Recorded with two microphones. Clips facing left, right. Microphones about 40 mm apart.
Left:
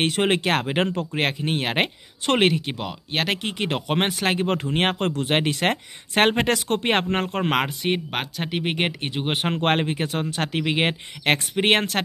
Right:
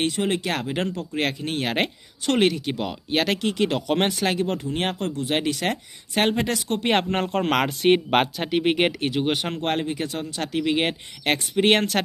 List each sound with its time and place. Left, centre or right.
0.0 s speech: left
2.7 s speech: centre
3.3 s speech: left
4.6 s speech: left
6.9 s speech: left
7.4 s speech: centre
9.3 s speech: left
9.6 s speech: left
10.7 s speech: left